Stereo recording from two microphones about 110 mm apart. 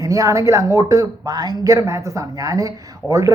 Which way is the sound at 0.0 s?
30° right (ahead or behind).